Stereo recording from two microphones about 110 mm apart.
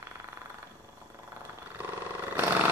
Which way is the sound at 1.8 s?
20° right (ahead or behind).